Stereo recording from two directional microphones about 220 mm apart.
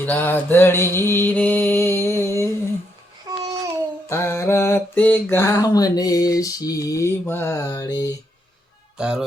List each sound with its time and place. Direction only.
0.0 s music: 10° left (ahead or behind)
3.3 s babbling: 15° right (ahead or behind)
4.1 s mantra: 10° left (ahead or behind)
9.0 s speech: 5° right (ahead or behind)